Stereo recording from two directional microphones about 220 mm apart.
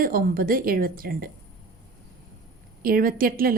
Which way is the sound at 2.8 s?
40° right (ahead or behind).